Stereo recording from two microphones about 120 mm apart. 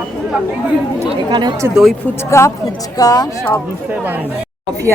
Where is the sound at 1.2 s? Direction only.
35° right (ahead or behind).